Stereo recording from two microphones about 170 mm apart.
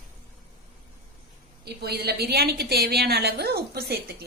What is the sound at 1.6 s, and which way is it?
A woman's voice, 70° right (ahead or behind).